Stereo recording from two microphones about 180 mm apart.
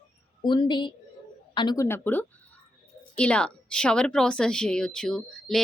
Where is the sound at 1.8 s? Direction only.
10° left (ahead or behind).